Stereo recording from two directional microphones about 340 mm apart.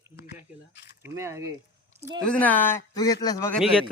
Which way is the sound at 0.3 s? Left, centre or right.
Left.